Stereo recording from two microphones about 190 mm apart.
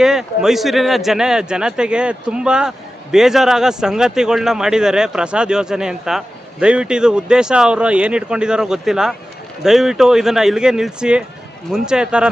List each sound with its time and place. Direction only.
0.0 s speech: 5° right (ahead or behind)